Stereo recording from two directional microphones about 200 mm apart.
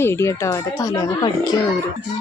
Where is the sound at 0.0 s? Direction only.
15° left (ahead or behind).